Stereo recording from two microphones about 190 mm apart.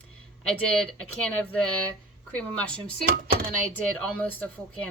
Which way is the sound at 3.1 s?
50° right (ahead or behind).